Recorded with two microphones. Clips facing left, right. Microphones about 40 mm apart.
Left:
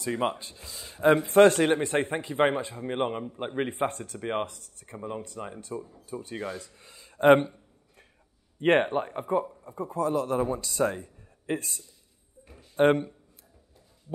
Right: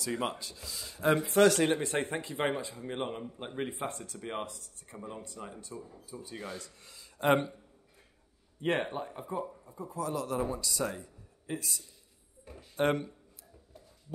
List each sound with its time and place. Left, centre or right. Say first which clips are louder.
0.0 s speech: left 5 dB; left
8.5 s speech: left 9 dB; left
12.7 s speech: left 7 dB; left